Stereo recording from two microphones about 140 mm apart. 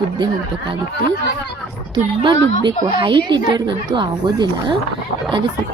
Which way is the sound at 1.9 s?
35° right (ahead or behind).